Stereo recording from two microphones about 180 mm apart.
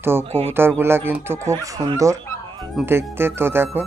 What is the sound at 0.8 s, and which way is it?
Speech, 10° right (ahead or behind).